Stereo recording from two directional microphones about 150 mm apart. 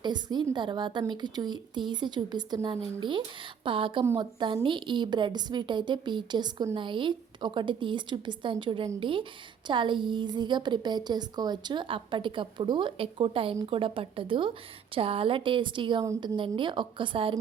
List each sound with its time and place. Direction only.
0.0 s speech: 30° right (ahead or behind)